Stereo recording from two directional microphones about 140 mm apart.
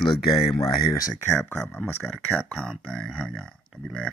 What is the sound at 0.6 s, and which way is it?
Speech, 35° left (ahead or behind).